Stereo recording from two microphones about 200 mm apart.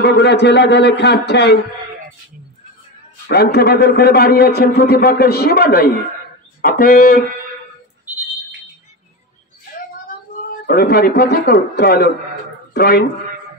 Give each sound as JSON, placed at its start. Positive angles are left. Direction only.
{"t": 0.0, "sound": "a man's voice", "side_deg": 55}
{"t": 3.3, "sound": "speech", "side_deg": 55}
{"t": 10.7, "sound": "speech", "side_deg": 50}